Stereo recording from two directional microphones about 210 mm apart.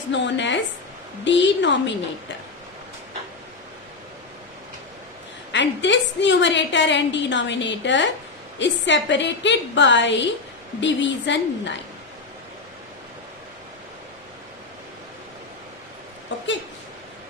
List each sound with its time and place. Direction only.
0.1 s a woman's voice: 60° left (ahead or behind)
5.5 s a woman's voice: 60° left (ahead or behind)